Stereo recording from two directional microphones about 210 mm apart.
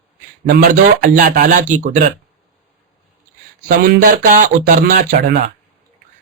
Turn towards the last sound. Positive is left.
turn(degrees=-40)  # may be behind; listen again after turning